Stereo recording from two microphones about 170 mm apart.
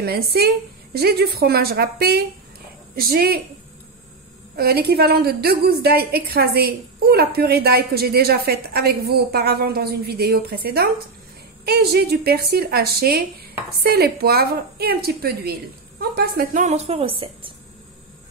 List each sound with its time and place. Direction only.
0.0 s a woman's voice: 65° right (ahead or behind)
4.6 s a woman's voice: 65° right (ahead or behind); by 17.5 s 30° right (ahead or behind)